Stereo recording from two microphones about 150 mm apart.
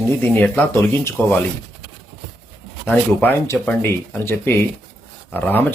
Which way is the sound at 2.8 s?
10° left (ahead or behind).